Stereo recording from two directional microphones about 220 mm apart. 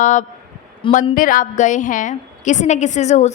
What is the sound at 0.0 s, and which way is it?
A woman's voice, 35° left (ahead or behind).